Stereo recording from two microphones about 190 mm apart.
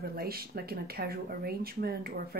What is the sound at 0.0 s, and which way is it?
Speech, 55° right (ahead or behind).